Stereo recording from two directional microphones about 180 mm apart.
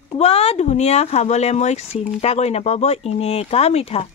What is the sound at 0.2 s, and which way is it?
Speech, 35° left (ahead or behind).